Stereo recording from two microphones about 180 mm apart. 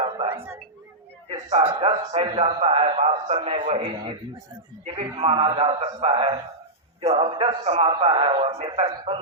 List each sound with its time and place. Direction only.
1.3 s a man's voice: 35° right (ahead or behind)
5.2 s a man's voice: 30° right (ahead or behind)